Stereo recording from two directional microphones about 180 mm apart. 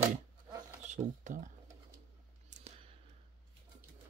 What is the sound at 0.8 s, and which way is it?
Speech, 40° right (ahead or behind).